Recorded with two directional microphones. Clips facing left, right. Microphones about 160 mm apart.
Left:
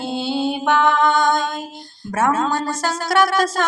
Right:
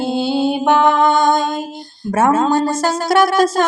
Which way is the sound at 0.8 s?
45° right (ahead or behind).